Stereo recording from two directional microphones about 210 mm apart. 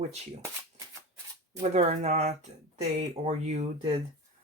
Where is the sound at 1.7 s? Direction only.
30° right (ahead or behind).